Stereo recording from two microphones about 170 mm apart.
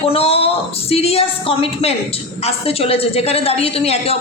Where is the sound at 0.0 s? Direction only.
35° left (ahead or behind).